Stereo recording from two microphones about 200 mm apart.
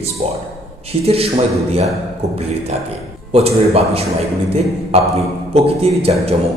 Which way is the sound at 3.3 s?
30° right (ahead or behind).